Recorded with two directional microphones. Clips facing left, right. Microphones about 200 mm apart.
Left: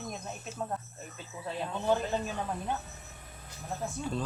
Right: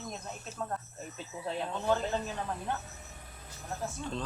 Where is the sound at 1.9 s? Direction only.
15° left (ahead or behind).